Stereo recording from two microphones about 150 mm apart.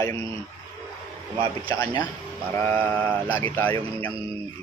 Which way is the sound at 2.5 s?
10° left (ahead or behind).